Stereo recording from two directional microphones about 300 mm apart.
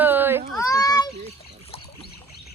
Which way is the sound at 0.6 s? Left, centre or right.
Centre.